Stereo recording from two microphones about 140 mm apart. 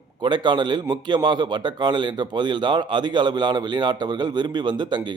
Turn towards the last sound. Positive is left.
turn(degrees=-30)  # may be behind; listen again after turning